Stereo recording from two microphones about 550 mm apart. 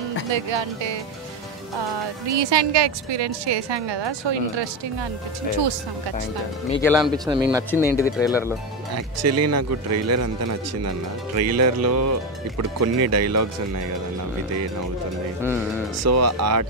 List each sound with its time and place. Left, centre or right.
0.3 s a woman's voice: right
2.2 s a woman's voice: right
6.7 s speech: centre
8.9 s speech: right
11.3 s speech: right
16.0 s speech: right